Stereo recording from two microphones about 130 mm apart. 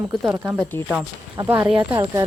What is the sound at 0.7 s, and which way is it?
Speech, 20° left (ahead or behind).